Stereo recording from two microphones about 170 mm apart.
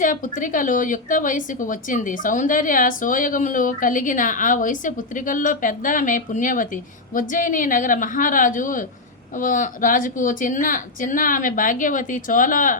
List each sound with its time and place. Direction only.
0.0 s a woman's voice: 50° left (ahead or behind)